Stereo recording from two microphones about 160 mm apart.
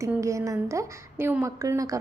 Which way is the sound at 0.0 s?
20° right (ahead or behind).